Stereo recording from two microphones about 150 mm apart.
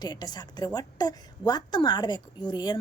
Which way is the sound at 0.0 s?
25° left (ahead or behind).